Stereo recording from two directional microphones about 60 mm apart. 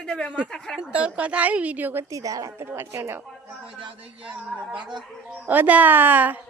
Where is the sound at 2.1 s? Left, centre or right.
Right.